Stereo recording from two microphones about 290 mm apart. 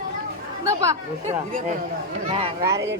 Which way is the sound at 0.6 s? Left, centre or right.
Centre.